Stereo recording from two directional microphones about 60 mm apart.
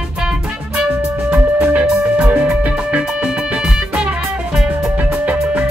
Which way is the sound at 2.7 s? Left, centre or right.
Right.